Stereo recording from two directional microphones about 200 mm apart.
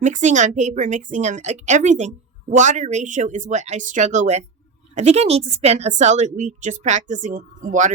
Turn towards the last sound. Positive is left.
turn(degrees=-40)  # may be behind; listen again after turning